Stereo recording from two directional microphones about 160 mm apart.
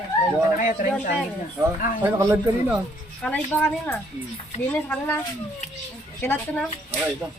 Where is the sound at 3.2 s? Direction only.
10° left (ahead or behind).